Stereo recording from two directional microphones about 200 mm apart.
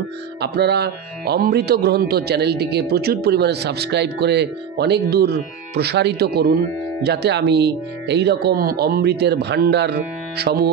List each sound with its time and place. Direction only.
0.4 s speech: 55° right (ahead or behind)